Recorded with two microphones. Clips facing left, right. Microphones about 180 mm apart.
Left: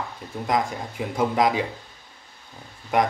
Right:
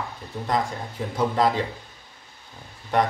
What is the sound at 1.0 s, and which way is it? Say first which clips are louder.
Speech: left 1 dB; 10° left (ahead or behind).